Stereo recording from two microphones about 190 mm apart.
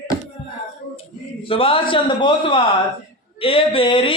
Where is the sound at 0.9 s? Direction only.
30° left (ahead or behind).